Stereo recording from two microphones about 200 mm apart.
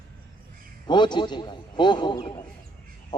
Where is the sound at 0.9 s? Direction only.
20° left (ahead or behind).